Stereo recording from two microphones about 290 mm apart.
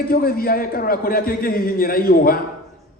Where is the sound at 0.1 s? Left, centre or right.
Left.